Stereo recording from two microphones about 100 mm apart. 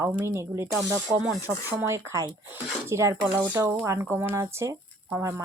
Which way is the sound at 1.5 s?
25° right (ahead or behind).